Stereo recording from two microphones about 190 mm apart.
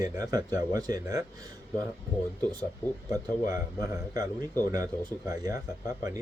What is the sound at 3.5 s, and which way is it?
Speech, 20° right (ahead or behind).